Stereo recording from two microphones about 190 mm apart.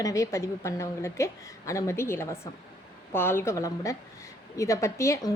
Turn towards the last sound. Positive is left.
turn(degrees=15)  # may be behind; listen again after turning